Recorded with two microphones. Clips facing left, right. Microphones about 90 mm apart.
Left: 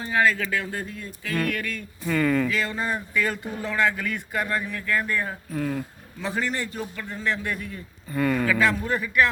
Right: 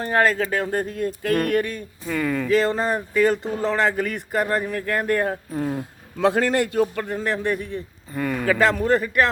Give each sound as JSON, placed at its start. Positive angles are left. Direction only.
{"t": 0.0, "sound": "speech", "side_deg": -50}
{"t": 2.0, "sound": "speech", "side_deg": -5}
{"t": 2.5, "sound": "speech", "side_deg": -40}
{"t": 5.5, "sound": "speech", "side_deg": -25}
{"t": 6.1, "sound": "speech", "side_deg": -70}
{"t": 8.1, "sound": "speech", "side_deg": -5}
{"t": 8.4, "sound": "speech", "side_deg": -45}